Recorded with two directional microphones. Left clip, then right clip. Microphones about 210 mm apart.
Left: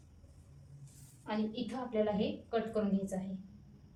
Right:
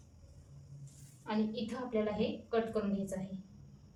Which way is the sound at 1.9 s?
15° right (ahead or behind).